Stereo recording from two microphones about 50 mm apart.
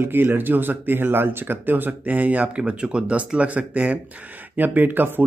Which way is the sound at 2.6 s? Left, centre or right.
Centre.